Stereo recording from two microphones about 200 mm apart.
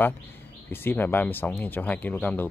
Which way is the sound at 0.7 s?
10° left (ahead or behind).